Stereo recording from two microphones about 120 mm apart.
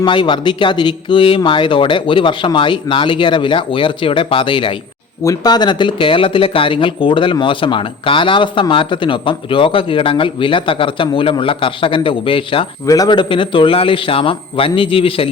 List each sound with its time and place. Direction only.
0.0 s speech: 40° left (ahead or behind)
5.2 s speech: 30° left (ahead or behind); by 12.6 s 45° left (ahead or behind)
12.8 s speech: 30° left (ahead or behind); by 15.3 s 50° left (ahead or behind)